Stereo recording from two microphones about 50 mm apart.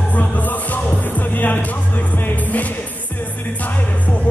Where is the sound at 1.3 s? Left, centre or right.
Left.